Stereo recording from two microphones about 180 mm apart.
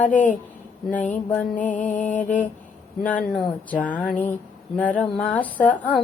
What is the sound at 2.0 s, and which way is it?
Mantra, 45° left (ahead or behind).